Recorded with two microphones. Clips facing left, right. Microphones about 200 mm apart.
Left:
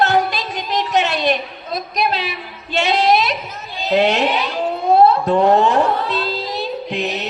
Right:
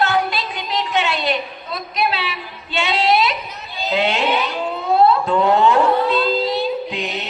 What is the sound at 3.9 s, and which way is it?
Music, 40° left (ahead or behind).